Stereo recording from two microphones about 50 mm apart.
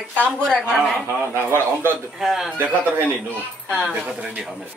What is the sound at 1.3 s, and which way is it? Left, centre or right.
Speech, right.